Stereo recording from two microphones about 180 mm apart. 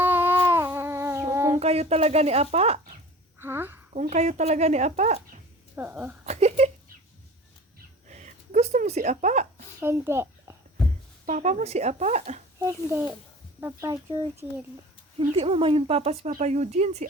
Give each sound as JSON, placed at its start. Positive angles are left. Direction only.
{"t": 0.0, "sound": "cat", "side_deg": -10}
{"t": 1.5, "sound": "speech", "side_deg": -35}
{"t": 3.4, "sound": "a woman's voice", "side_deg": -10}
{"t": 3.9, "sound": "speech", "side_deg": -40}
{"t": 5.7, "sound": "speech", "side_deg": -10}
{"t": 6.2, "sound": "a sound", "side_deg": -35}
{"t": 8.0, "sound": "a sound", "side_deg": -40}
{"t": 9.8, "sound": "speech", "side_deg": -15}
{"t": 11.3, "sound": "speech", "side_deg": -40}
{"t": 12.5, "sound": "speech", "side_deg": -15}
{"t": 15.2, "sound": "speech", "side_deg": -35}